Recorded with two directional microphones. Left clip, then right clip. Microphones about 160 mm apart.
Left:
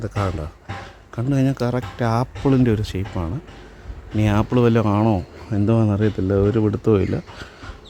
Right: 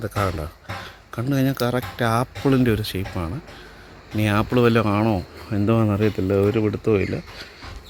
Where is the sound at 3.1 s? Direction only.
Centre (ahead or behind).